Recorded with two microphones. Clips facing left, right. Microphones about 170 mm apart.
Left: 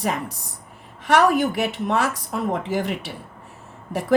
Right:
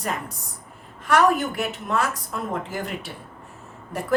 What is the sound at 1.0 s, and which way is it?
Speech, 70° left (ahead or behind).